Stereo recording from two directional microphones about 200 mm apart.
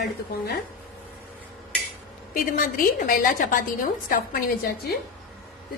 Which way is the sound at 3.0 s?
45° left (ahead or behind).